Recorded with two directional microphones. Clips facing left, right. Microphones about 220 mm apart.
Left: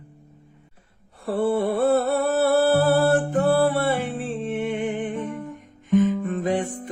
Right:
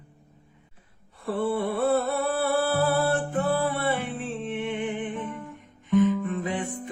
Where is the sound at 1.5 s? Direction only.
45° left (ahead or behind).